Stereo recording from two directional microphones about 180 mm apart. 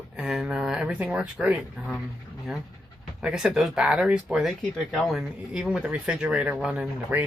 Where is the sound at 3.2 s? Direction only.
5° right (ahead or behind).